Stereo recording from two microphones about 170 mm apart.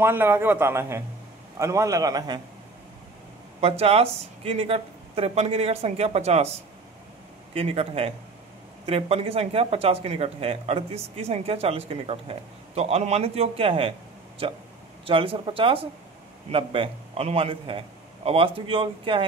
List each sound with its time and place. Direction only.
0.0 s a man's voice: 15° right (ahead or behind)
3.6 s speech: 35° right (ahead or behind)
7.5 s speech: 35° right (ahead or behind)